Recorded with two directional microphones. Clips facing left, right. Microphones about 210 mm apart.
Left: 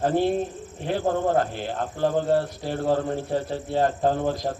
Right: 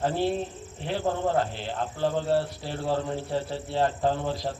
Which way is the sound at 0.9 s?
45° left (ahead or behind).